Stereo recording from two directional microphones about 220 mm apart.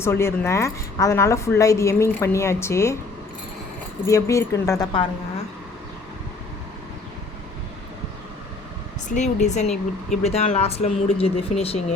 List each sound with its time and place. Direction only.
0.0 s a woman's voice: 10° left (ahead or behind)
4.0 s a woman's voice: 15° left (ahead or behind)
9.0 s speech: 30° left (ahead or behind)